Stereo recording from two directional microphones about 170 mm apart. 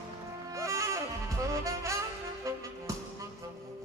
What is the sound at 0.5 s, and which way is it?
Music, 20° right (ahead or behind).